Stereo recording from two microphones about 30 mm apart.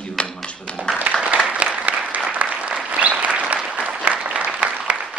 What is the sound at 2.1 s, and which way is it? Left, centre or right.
Applause, right.